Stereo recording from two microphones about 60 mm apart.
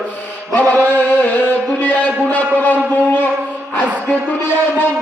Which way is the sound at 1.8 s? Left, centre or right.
Left.